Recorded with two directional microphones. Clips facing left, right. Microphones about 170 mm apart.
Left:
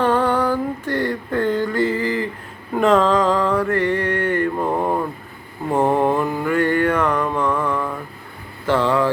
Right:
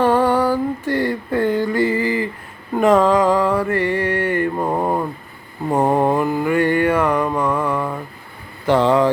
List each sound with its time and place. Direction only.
0.0 s a sound: 10° right (ahead or behind)
2.8 s mantra: 10° right (ahead or behind)
6.4 s music: 15° right (ahead or behind)
8.6 s vehicle: 20° right (ahead or behind)